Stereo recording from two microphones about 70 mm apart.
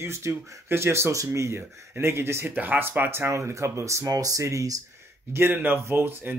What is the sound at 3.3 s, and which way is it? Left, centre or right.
Speech, right.